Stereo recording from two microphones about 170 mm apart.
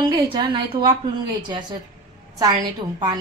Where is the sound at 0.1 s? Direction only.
30° right (ahead or behind).